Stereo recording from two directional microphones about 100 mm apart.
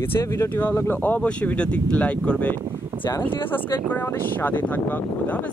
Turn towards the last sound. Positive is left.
turn(degrees=15)  # may be behind; listen again after turning